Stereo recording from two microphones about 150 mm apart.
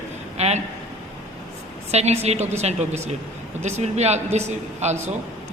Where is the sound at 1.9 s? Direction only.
45° right (ahead or behind).